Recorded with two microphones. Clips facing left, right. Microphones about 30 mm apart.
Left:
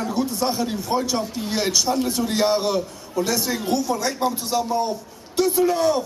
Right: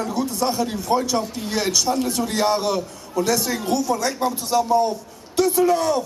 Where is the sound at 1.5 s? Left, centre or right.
Left; by 4.7 s centre.